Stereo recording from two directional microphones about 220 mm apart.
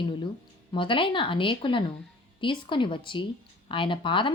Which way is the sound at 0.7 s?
20° left (ahead or behind).